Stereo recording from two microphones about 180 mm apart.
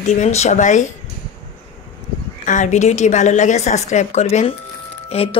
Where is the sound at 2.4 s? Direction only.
45° left (ahead or behind).